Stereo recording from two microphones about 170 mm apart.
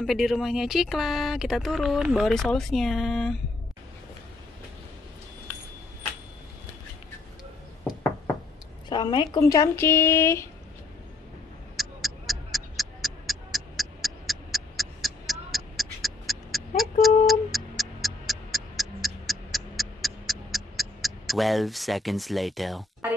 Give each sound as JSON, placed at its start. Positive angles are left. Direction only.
{"t": 0.0, "sound": "speech", "side_deg": 0}
{"t": 8.8, "sound": "speech", "side_deg": 25}
{"t": 11.7, "sound": "tick-tock", "side_deg": 0}
{"t": 17.0, "sound": "a sound", "side_deg": 0}